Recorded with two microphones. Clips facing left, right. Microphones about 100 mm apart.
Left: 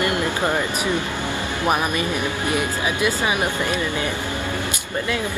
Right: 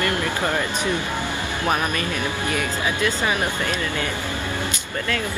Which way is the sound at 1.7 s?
15° left (ahead or behind).